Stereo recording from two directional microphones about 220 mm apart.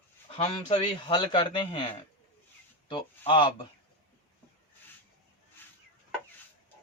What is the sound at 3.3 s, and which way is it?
Speech, 20° left (ahead or behind).